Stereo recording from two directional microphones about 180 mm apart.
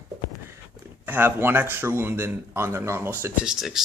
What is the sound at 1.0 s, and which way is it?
A man's voice, 10° right (ahead or behind).